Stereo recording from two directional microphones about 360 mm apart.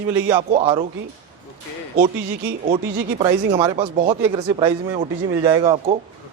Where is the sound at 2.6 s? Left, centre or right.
Centre.